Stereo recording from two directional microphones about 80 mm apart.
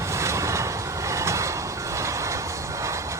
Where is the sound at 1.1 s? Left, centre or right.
Right.